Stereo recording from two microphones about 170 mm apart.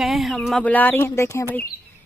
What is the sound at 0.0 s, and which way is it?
A woman's voice, centre (ahead or behind).